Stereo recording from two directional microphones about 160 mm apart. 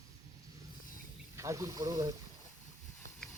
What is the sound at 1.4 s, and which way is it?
Speech, 20° right (ahead or behind).